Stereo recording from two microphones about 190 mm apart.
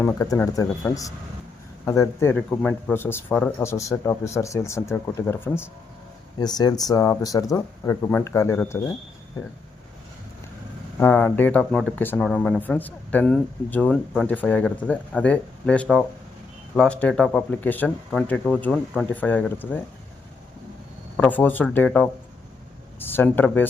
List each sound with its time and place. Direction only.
0.0 s speech: 15° left (ahead or behind)
11.0 s speech: 10° left (ahead or behind)
21.2 s speech: 10° left (ahead or behind)